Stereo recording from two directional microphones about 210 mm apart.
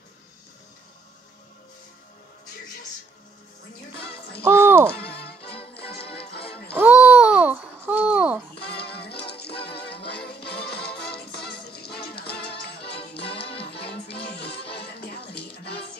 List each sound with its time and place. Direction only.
4.4 s a sound: 10° right (ahead or behind)
5.4 s music: 25° left (ahead or behind)
6.7 s babbling: 10° right (ahead or behind)
8.5 s music: 50° left (ahead or behind)
13.4 s music: 25° left (ahead or behind)
13.8 s music: 50° left (ahead or behind)